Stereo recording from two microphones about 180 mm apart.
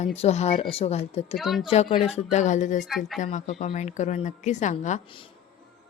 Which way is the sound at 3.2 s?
40° left (ahead or behind).